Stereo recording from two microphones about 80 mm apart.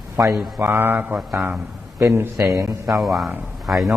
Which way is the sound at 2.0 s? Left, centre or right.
Right.